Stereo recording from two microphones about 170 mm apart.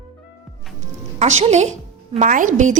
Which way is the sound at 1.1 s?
40° right (ahead or behind).